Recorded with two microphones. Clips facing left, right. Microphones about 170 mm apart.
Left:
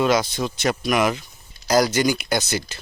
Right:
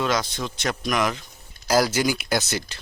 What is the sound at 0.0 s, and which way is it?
Speech, 10° left (ahead or behind).